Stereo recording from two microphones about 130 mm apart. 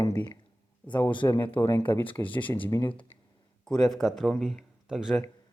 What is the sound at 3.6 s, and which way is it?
Speech, 5° left (ahead or behind).